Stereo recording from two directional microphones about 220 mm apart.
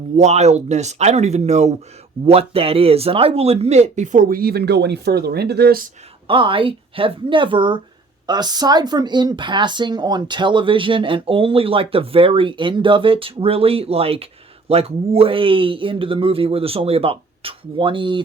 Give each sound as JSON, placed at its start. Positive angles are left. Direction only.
{"t": 0.2, "sound": "speech", "side_deg": -30}
{"t": 6.2, "sound": "speech", "side_deg": -20}